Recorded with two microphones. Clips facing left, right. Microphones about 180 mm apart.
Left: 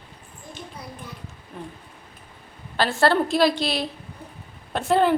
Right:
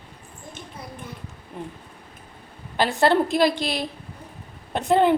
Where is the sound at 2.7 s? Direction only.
15° right (ahead or behind).